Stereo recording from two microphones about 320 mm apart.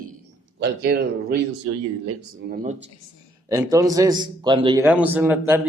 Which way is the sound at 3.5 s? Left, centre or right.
Centre.